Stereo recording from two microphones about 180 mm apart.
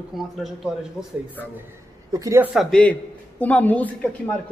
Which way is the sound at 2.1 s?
15° right (ahead or behind).